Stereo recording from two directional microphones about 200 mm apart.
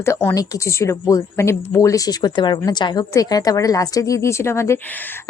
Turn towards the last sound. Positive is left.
turn(degrees=15)  # may be behind; listen again after turning